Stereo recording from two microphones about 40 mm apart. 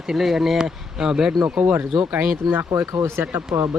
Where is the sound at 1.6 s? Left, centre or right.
Right.